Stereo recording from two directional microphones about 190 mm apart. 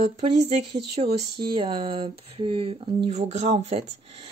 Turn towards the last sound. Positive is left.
turn(degrees=-35)  # may be behind; listen again after turning